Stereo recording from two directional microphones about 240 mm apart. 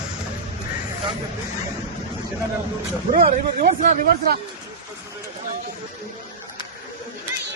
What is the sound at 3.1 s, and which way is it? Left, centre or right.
Speech, right.